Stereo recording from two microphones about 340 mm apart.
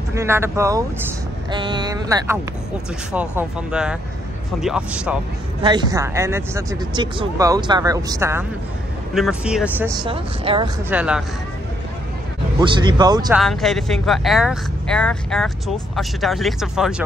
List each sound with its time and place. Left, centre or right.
0.1 s speech: centre
10.9 s speech: centre
12.5 s speech: centre
13.4 s speech: centre